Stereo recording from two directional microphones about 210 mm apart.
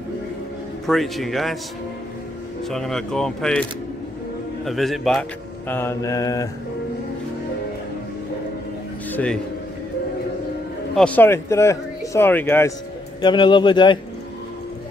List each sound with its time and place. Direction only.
0.8 s speech: centre (ahead or behind)
2.7 s speech: centre (ahead or behind)
4.6 s speech: centre (ahead or behind); by 6.5 s 15° left (ahead or behind)
9.1 s a man's voice: 5° left (ahead or behind)
11.0 s speech: 5° left (ahead or behind)
13.2 s speech: 20° left (ahead or behind)